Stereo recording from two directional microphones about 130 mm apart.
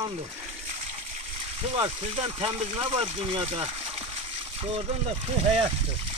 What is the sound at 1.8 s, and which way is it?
Speech, 45° right (ahead or behind).